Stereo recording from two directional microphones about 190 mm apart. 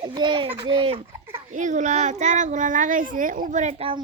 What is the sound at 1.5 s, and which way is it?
A child's voice, 40° right (ahead or behind).